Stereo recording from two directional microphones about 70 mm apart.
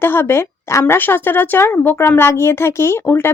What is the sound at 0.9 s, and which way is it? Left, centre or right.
Speech, left.